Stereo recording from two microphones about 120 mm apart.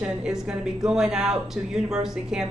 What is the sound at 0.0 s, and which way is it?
Speech, 5° right (ahead or behind).